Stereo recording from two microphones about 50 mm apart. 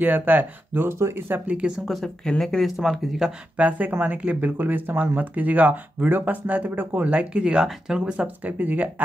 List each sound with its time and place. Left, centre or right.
0.0 s speech: right
0.8 s speech: right
1.6 s speech: right
2.2 s speech: centre
2.6 s speech: centre
3.5 s speech: right
8.5 s speech: right